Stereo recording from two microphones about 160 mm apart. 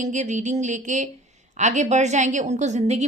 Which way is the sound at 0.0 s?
50° right (ahead or behind).